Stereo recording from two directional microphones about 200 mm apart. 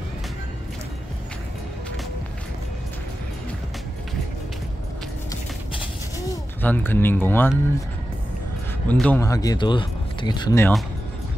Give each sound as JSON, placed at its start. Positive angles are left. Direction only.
{"t": 6.1, "sound": "speech", "side_deg": 10}
{"t": 8.8, "sound": "speech", "side_deg": 5}
{"t": 9.2, "sound": "speech", "side_deg": 15}